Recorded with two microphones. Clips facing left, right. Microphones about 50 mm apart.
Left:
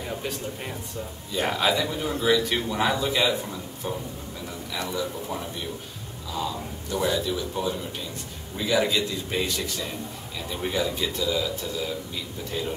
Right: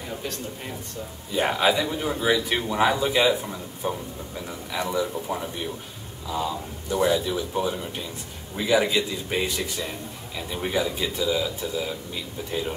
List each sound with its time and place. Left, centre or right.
1.3 s speech: centre